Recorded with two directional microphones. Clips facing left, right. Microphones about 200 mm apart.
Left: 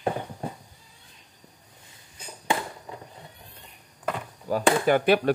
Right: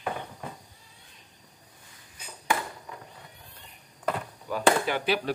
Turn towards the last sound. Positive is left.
turn(degrees=55)  # may be behind; listen again after turning